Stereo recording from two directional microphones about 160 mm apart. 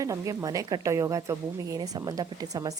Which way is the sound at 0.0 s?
20° right (ahead or behind).